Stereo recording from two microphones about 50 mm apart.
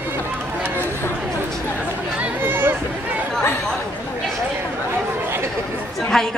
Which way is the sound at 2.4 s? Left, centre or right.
Right.